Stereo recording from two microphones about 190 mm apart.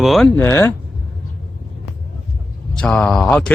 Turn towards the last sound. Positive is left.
turn(degrees=5)  # may be behind; listen again after turning